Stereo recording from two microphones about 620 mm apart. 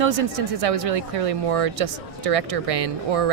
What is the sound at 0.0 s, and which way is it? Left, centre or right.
Speech, right.